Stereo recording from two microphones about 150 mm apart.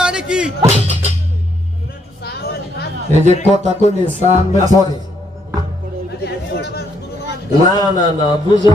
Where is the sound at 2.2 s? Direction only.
90° left.